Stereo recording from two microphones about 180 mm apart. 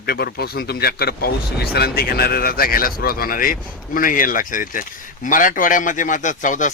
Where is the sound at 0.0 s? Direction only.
60° left (ahead or behind).